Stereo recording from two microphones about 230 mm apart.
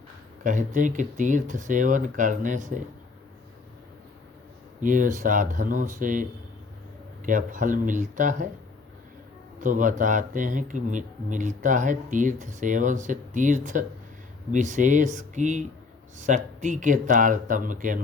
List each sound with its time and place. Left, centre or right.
0.4 s speech: right
4.8 s speech: right
7.3 s speech: right
9.6 s speech: right